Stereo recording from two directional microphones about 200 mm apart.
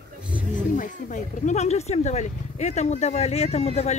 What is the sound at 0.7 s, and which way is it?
Speech, 40° left (ahead or behind).